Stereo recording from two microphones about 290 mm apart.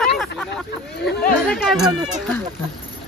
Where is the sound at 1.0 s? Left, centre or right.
Left.